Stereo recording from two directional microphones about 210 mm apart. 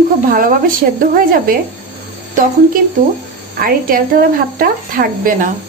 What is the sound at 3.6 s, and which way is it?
Speech, 45° right (ahead or behind).